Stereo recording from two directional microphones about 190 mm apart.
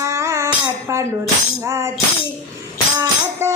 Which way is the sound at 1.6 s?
15° right (ahead or behind).